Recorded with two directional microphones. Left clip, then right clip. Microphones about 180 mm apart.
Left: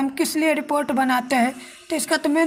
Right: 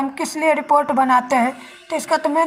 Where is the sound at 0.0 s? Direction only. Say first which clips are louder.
Right 2 dB; 25° left (ahead or behind).